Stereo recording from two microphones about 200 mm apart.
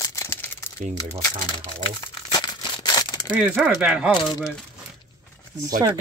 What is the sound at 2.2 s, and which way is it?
Crumpling, 20° left (ahead or behind).